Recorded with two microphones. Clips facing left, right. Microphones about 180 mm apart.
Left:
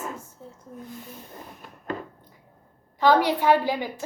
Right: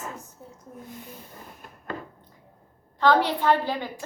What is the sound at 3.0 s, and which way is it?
Speech, 10° left (ahead or behind).